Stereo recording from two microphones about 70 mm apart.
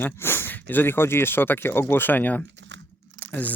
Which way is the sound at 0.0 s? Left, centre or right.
Left.